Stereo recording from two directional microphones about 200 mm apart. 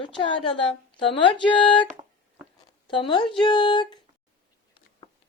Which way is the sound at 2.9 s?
25° left (ahead or behind).